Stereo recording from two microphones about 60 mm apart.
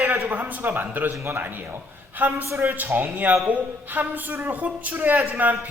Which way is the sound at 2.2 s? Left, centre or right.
Right.